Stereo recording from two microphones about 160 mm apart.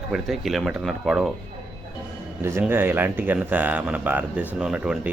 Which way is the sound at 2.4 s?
15° right (ahead or behind).